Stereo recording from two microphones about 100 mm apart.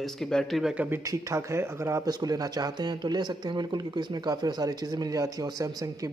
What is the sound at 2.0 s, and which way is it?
Speech, 40° right (ahead or behind).